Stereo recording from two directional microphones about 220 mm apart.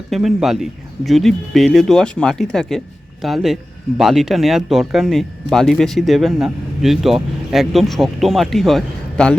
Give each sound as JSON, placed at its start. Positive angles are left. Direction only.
{"t": 0.1, "sound": "speech", "side_deg": 0}